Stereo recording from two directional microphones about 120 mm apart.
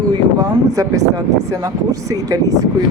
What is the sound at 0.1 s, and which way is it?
Speech, 30° right (ahead or behind).